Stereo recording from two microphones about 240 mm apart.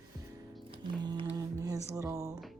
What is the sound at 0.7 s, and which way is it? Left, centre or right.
Music, centre.